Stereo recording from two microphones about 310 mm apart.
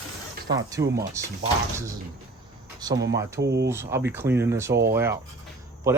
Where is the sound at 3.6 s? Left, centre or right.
Centre.